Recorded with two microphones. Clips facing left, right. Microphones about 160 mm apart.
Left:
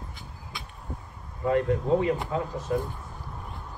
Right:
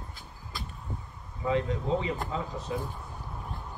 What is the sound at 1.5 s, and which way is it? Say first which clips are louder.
Speech: left 5 dB; 55° left (ahead or behind).